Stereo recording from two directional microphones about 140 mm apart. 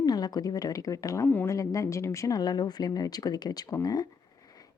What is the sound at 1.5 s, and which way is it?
A woman's voice, 25° left (ahead or behind).